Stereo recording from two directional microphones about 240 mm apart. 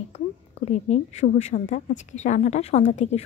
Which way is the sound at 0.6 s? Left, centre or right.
Left.